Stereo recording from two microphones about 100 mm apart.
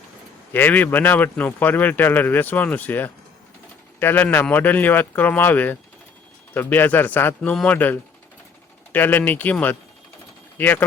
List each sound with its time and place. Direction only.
0.5 s a man's voice: 20° left (ahead or behind)